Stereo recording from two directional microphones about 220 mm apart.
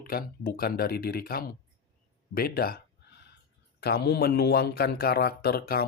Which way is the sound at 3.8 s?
45° left (ahead or behind).